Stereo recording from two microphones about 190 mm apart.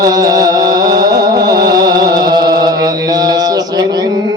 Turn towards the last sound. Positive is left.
turn(degrees=-20)  # may be behind; listen again after turning